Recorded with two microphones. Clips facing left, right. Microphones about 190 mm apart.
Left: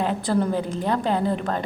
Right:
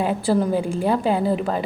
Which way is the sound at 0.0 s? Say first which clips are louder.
Right 2 dB; 10° right (ahead or behind).